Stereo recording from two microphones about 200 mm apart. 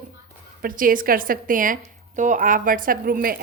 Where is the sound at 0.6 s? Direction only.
45° right (ahead or behind).